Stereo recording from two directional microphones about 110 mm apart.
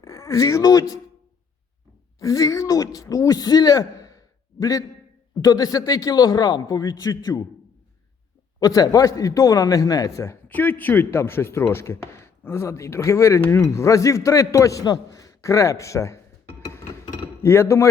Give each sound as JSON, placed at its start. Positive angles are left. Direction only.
{"t": 0.0, "sound": "speech", "side_deg": 30}
{"t": 2.1, "sound": "a man's voice", "side_deg": 30}
{"t": 8.5, "sound": "a man's voice", "side_deg": 35}
{"t": 10.2, "sound": "speech", "side_deg": 20}
{"t": 17.4, "sound": "speech", "side_deg": 25}